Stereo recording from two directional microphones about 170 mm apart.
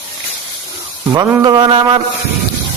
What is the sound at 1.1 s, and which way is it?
Speech, 25° right (ahead or behind).